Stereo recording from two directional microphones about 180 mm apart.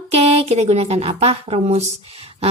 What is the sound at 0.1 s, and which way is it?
A woman's voice, 35° right (ahead or behind).